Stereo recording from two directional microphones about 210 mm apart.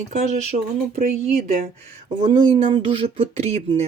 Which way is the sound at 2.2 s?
25° right (ahead or behind).